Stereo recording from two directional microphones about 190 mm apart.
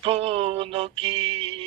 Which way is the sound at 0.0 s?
30° right (ahead or behind).